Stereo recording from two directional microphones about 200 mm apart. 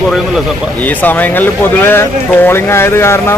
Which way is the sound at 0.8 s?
10° left (ahead or behind).